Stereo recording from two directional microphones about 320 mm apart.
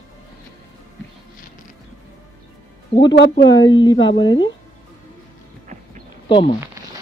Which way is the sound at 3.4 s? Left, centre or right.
Centre.